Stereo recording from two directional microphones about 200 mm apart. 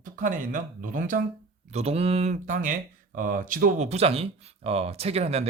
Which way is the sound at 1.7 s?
30° right (ahead or behind).